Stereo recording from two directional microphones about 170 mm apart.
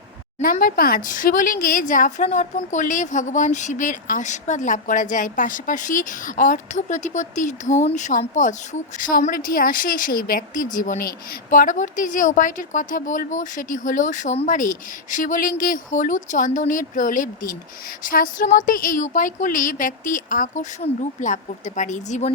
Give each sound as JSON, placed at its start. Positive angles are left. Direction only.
{"t": 0.5, "sound": "a woman's voice", "side_deg": 55}